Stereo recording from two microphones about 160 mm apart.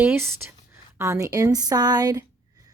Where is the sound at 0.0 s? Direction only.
10° right (ahead or behind).